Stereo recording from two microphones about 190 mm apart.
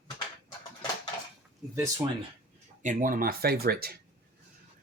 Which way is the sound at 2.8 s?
40° right (ahead or behind).